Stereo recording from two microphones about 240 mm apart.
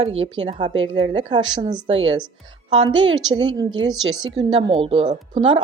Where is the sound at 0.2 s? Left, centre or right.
Centre.